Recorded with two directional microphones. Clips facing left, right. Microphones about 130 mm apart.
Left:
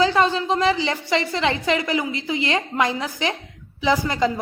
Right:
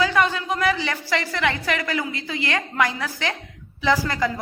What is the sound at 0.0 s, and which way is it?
A woman's voice, 30° left (ahead or behind).